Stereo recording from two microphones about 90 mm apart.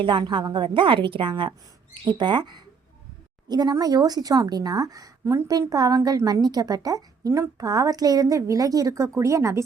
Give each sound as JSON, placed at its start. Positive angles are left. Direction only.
{"t": 0.0, "sound": "a woman's voice", "side_deg": -65}
{"t": 2.1, "sound": "a woman's voice", "side_deg": -55}